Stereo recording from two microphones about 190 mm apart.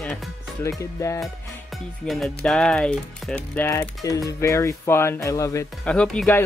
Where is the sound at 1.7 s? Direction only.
Centre (ahead or behind).